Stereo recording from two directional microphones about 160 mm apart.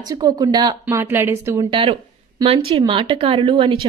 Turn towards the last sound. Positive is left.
turn(degrees=-30)  # may be behind; listen again after turning